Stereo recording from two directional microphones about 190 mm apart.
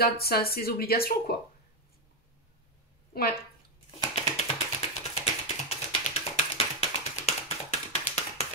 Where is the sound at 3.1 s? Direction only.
55° left (ahead or behind).